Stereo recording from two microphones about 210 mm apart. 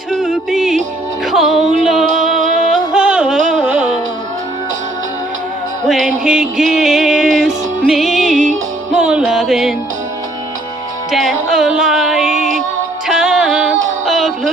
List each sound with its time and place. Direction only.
0.1 s music: centre (ahead or behind)
6.2 s music: centre (ahead or behind)
11.1 s music: centre (ahead or behind)
11.5 s a sound: centre (ahead or behind)
12.4 s music: 40° right (ahead or behind)
13.1 s music: centre (ahead or behind)
14.0 s a sound: centre (ahead or behind)